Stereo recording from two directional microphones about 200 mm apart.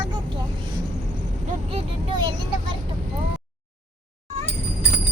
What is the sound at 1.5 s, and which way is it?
Vehicle, 30° right (ahead or behind).